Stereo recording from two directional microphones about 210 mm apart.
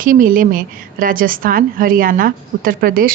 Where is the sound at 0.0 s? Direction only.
40° right (ahead or behind).